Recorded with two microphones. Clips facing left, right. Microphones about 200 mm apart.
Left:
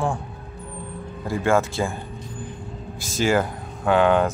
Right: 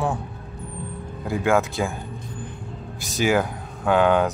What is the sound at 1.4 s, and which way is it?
Speech, centre (ahead or behind).